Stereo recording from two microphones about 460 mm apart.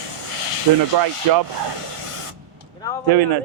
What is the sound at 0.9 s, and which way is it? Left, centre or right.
Speech, right.